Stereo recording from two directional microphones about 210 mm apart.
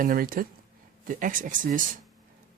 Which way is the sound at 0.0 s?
40° right (ahead or behind).